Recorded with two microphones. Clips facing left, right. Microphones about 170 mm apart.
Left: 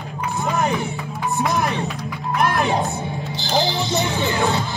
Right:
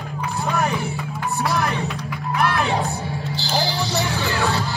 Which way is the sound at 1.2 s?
20° left (ahead or behind).